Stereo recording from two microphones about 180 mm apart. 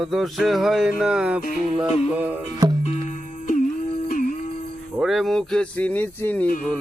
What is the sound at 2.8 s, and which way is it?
Music, 40° left (ahead or behind).